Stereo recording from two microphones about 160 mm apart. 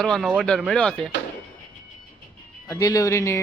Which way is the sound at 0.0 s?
Centre (ahead or behind).